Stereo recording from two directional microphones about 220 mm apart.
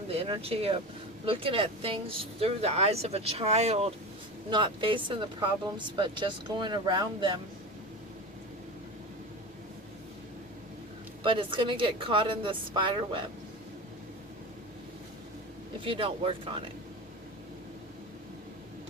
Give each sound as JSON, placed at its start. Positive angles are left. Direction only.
{"t": 0.1, "sound": "speech", "side_deg": -25}
{"t": 11.2, "sound": "speech", "side_deg": -25}
{"t": 15.8, "sound": "speech", "side_deg": -25}